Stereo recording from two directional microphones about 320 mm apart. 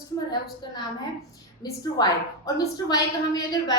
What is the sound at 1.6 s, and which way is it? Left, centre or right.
A woman's voice, centre.